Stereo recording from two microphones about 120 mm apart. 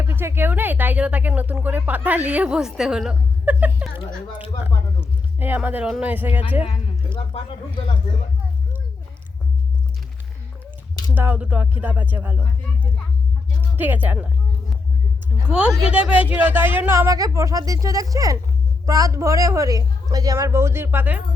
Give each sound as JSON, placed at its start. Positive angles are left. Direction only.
{"t": 0.0, "sound": "speech", "side_deg": -20}
{"t": 5.4, "sound": "speech", "side_deg": -15}
{"t": 7.3, "sound": "speech", "side_deg": 55}
{"t": 11.1, "sound": "speech", "side_deg": -15}
{"t": 13.6, "sound": "speech", "side_deg": -15}
{"t": 15.4, "sound": "a woman's voice", "side_deg": -10}